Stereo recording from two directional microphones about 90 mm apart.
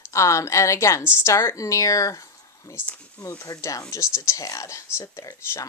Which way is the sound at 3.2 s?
40° left (ahead or behind).